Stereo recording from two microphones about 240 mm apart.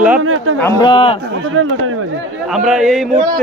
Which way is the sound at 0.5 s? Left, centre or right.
Centre.